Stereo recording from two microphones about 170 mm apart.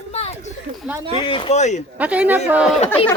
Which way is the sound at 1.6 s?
45° left (ahead or behind).